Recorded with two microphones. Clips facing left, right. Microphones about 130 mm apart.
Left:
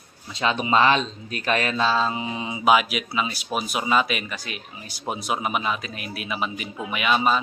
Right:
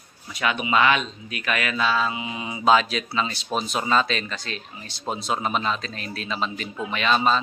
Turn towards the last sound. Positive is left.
turn(degrees=10)  # may be behind; listen again after turning